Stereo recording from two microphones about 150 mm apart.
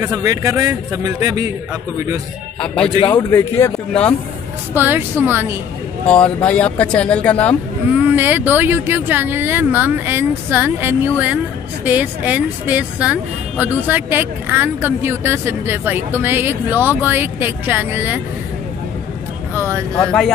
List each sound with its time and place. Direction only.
0.0 s a man's voice: 20° right (ahead or behind)
3.0 s a man's voice: 35° left (ahead or behind)
3.3 s speech: 15° left (ahead or behind)
4.7 s speech: 15° right (ahead or behind)
6.0 s speech: 10° left (ahead or behind)
8.2 s speech: 10° right (ahead or behind)
19.5 s speech: 15° right (ahead or behind)
20.0 s speech: 5° left (ahead or behind)